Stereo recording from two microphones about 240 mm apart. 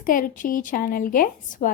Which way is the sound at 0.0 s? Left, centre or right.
Left.